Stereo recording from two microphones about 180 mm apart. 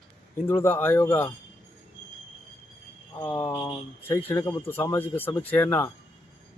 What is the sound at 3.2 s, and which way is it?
Speech, 10° left (ahead or behind).